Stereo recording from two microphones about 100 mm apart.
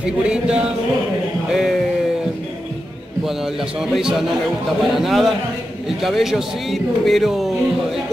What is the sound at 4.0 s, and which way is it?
A man's voice, 5° right (ahead or behind).